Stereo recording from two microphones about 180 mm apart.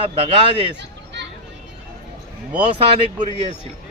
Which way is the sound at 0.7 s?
75° right (ahead or behind).